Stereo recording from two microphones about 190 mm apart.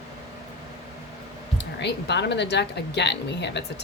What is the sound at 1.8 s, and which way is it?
A woman's voice, 65° left (ahead or behind).